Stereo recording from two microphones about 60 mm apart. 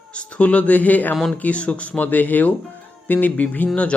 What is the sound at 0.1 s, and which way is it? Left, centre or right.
Speech, left.